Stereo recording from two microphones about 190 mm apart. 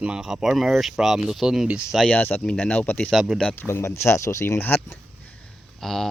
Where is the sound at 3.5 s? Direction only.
10° left (ahead or behind).